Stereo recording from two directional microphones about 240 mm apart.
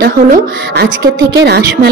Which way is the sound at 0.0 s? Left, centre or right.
Right.